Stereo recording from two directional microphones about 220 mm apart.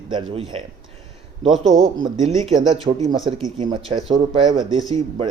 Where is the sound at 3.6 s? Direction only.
20° right (ahead or behind).